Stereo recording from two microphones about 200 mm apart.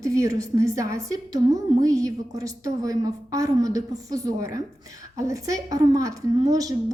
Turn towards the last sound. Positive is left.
turn(degrees=-20)  # may be behind; listen again after turning